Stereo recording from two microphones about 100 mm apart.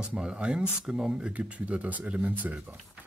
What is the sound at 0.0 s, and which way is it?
Speech, 10° right (ahead or behind).